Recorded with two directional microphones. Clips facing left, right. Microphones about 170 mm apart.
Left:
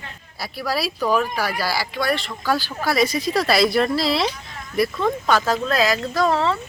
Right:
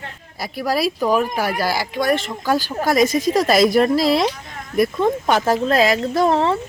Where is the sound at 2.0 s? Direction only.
45° right (ahead or behind).